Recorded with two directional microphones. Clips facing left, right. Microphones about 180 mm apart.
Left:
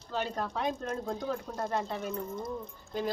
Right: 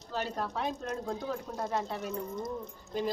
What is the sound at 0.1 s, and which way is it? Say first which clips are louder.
Speech: left 1 dB; 5° right (ahead or behind).